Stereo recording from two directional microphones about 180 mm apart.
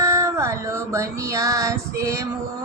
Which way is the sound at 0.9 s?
20° right (ahead or behind).